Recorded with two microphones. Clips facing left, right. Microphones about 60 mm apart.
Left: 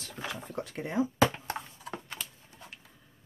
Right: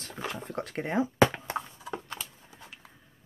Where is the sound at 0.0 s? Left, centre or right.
Right.